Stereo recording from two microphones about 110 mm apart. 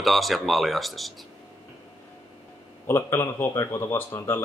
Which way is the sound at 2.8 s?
25° left (ahead or behind).